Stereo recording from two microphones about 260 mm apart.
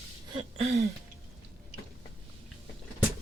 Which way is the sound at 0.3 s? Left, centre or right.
Right.